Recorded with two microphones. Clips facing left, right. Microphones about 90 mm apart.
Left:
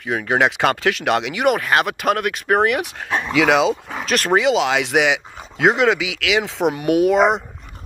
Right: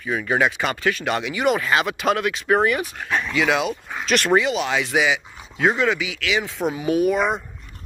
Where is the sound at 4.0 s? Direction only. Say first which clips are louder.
Right 1 dB; 40° left (ahead or behind).